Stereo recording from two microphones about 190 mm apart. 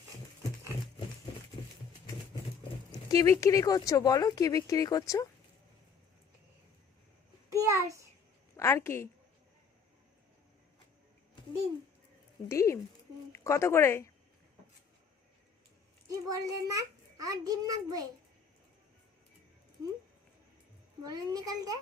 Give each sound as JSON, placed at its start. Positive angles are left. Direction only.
{"t": 3.1, "sound": "speech", "side_deg": 15}
{"t": 7.5, "sound": "a sound", "side_deg": -15}
{"t": 8.5, "sound": "speech", "side_deg": 15}
{"t": 12.5, "sound": "speech", "side_deg": 15}
{"t": 16.0, "sound": "a child's voice", "side_deg": -20}
{"t": 21.0, "sound": "a child's voice", "side_deg": -20}